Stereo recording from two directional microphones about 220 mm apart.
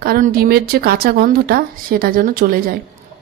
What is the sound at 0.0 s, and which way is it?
Speech, 40° right (ahead or behind).